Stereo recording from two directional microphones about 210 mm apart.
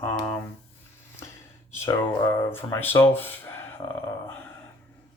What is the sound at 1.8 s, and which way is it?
Speech, 15° left (ahead or behind).